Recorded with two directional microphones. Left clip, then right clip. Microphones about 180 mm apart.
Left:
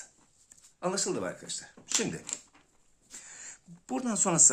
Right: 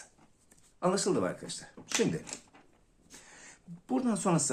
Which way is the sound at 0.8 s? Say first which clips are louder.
Right 3 dB; centre (ahead or behind).